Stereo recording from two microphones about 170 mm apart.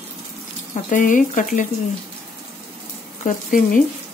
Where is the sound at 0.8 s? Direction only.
50° left (ahead or behind).